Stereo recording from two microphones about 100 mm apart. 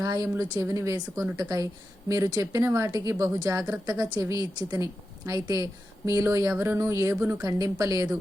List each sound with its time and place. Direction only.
0.0 s a woman's voice: 35° right (ahead or behind)